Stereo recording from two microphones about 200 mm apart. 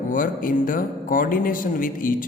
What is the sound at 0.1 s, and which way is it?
Speech, 45° left (ahead or behind).